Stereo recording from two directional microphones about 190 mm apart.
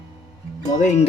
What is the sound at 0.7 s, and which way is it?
Speech, 40° left (ahead or behind).